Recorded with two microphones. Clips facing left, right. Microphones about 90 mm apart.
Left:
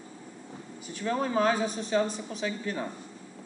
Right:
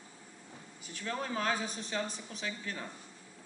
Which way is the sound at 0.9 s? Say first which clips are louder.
Left 9 dB; 15° left (ahead or behind).